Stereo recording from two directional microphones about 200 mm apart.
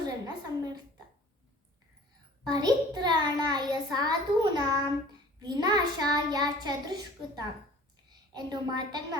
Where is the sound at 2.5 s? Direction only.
20° right (ahead or behind).